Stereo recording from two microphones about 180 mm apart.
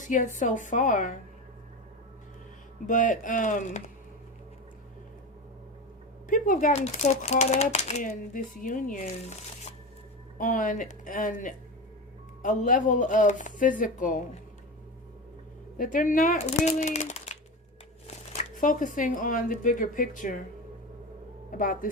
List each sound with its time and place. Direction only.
0.0 s speech: 45° left (ahead or behind)
2.8 s speech: 45° left (ahead or behind)
6.2 s speech: 50° left (ahead or behind)
15.8 s speech: 50° left (ahead or behind)
21.6 s speech: 50° left (ahead or behind)